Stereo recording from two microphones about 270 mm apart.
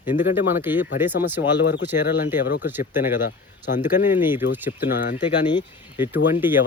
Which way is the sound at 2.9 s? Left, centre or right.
Centre.